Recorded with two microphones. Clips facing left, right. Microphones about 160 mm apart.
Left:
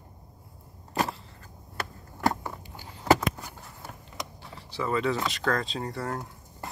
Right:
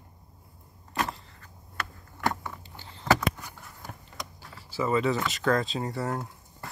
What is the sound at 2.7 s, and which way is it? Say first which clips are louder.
Vehicle: left 1 dB; 10° left (ahead or behind).